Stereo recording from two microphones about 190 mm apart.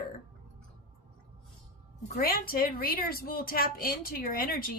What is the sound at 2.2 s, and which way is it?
Speech, 50° left (ahead or behind).